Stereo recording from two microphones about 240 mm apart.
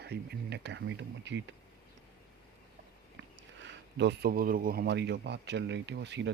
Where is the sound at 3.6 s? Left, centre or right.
Right.